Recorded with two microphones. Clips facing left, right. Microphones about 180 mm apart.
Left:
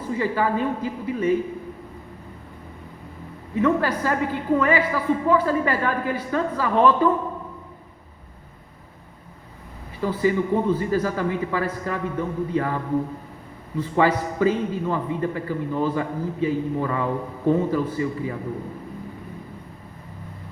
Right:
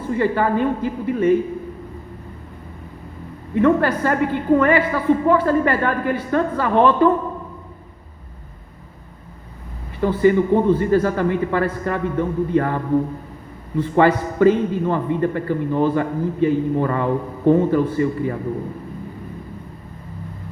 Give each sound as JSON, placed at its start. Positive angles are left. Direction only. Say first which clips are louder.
{"t": 0.1, "sound": "a man's voice", "louder": "right 4 dB", "side_deg": -55}
{"t": 3.5, "sound": "a man's voice", "louder": "right 5 dB", "side_deg": -55}
{"t": 10.2, "sound": "a man's voice", "louder": "right 6 dB", "side_deg": -55}